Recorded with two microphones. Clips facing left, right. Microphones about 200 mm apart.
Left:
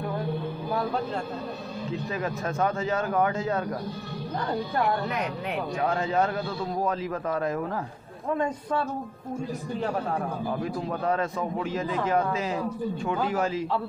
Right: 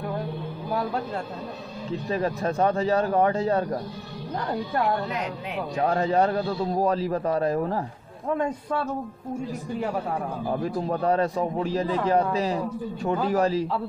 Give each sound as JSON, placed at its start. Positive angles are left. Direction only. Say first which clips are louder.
{"t": 1.9, "sound": "a man's voice", "louder": "right 5 dB", "side_deg": -35}
{"t": 5.8, "sound": "a man's voice", "louder": "right 4 dB", "side_deg": -35}
{"t": 10.6, "sound": "a man's voice", "louder": "right 3 dB", "side_deg": -35}